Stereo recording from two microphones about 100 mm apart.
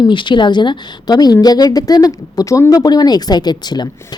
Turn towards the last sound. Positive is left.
turn(degrees=45)  # may be behind; listen again after turning